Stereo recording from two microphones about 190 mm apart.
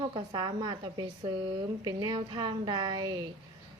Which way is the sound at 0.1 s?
20° right (ahead or behind).